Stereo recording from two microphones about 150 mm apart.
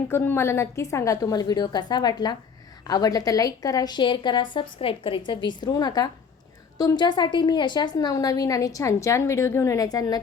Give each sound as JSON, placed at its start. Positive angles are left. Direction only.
{"t": 0.1, "sound": "a woman's voice", "side_deg": 15}